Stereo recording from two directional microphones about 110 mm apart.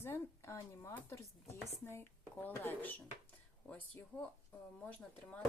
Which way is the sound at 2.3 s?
15° left (ahead or behind).